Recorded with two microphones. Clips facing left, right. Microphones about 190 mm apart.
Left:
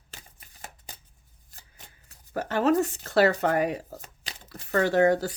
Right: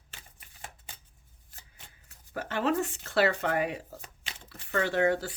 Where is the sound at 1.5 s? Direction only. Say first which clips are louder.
Left 2 dB; 40° left (ahead or behind).